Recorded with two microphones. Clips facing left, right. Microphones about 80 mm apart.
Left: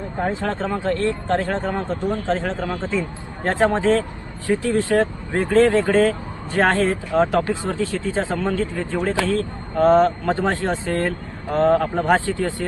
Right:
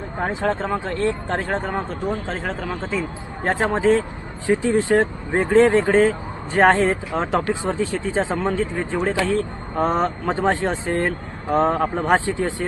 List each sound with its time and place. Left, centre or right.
0.2 s speech: centre
4.4 s speech: right